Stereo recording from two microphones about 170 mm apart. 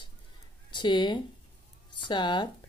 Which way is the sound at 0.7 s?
25° left (ahead or behind).